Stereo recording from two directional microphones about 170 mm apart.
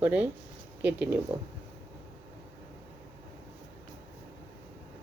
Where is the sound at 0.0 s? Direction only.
10° right (ahead or behind).